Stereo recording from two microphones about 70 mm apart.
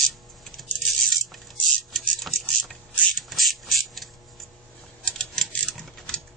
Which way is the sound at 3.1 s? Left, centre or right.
Centre.